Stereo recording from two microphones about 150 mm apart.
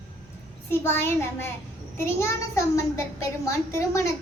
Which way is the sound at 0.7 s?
15° left (ahead or behind).